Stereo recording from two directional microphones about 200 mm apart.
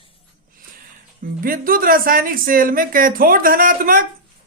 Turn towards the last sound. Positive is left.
turn(degrees=-45)  # may be behind; listen again after turning